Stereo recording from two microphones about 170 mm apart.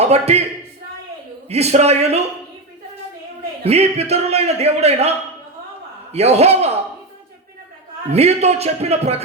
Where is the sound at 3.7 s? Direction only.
40° right (ahead or behind).